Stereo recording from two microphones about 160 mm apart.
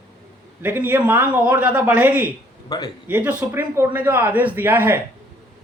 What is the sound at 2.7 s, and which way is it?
Speech, 30° left (ahead or behind).